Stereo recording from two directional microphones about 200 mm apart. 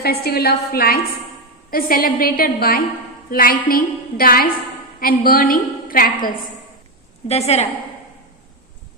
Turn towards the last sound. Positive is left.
turn(degrees=35)  # may be behind; listen again after turning